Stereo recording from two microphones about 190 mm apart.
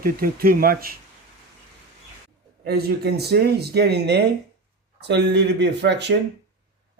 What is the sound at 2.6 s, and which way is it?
Speech, 60° right (ahead or behind).